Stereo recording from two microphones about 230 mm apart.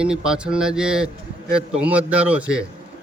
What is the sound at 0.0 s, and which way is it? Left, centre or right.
A man's voice, centre.